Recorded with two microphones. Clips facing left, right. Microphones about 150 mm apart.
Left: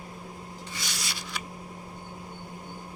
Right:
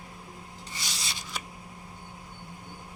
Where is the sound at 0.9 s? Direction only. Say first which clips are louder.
Left 2 dB; 25° right (ahead or behind).